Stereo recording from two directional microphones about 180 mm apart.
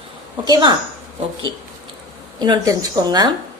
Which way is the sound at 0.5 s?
25° right (ahead or behind).